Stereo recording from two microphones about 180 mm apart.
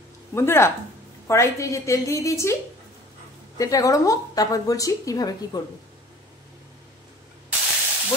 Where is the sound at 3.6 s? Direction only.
20° left (ahead or behind).